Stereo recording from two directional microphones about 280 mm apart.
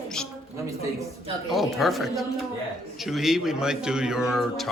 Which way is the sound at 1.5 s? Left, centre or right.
Centre.